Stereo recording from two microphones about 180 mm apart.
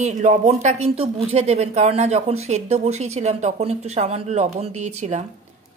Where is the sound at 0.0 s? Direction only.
40° right (ahead or behind).